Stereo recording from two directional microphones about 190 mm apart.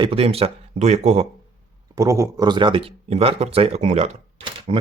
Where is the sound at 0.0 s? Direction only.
30° right (ahead or behind).